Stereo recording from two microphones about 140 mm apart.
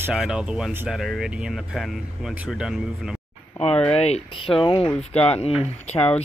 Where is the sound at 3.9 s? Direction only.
45° left (ahead or behind).